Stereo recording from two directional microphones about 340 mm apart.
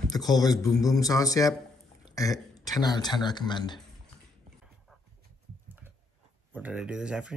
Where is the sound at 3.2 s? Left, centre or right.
Centre.